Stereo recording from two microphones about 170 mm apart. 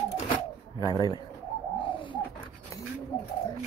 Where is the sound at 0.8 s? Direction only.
20° left (ahead or behind).